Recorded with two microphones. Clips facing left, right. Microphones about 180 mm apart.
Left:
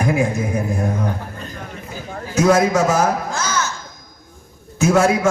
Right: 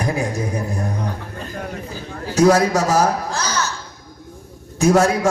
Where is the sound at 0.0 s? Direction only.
35° right (ahead or behind).